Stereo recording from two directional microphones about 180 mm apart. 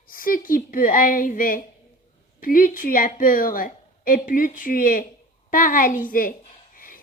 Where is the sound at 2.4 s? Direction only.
50° left (ahead or behind).